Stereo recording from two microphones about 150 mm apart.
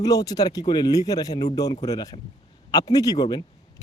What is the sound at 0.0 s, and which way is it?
Speech, 25° left (ahead or behind).